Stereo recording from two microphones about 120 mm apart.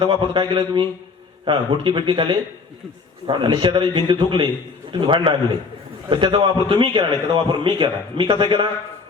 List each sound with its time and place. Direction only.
0.0 s a man's voice: 40° right (ahead or behind)